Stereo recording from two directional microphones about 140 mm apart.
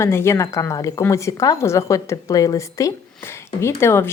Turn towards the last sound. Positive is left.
turn(degrees=20)  # may be behind; listen again after turning